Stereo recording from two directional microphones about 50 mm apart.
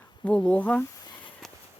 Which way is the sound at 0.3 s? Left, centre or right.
Left.